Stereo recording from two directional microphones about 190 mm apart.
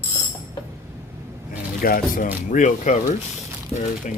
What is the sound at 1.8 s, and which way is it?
Speech, 50° left (ahead or behind).